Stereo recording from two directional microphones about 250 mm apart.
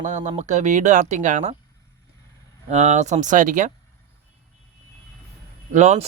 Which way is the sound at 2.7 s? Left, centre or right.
Right.